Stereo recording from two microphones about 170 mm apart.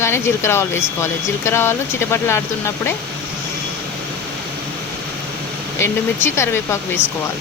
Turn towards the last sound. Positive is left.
turn(degrees=15)  # may be behind; listen again after turning